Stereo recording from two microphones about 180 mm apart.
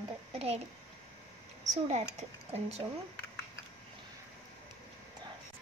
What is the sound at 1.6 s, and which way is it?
A woman's voice, 40° right (ahead or behind).